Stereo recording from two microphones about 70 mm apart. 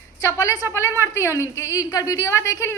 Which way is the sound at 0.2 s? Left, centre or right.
Left.